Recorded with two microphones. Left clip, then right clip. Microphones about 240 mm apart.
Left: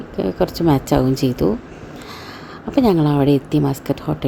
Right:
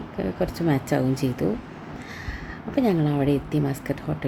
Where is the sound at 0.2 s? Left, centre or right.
Left.